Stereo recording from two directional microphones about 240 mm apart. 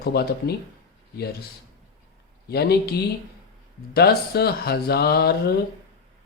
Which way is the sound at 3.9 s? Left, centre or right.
Left.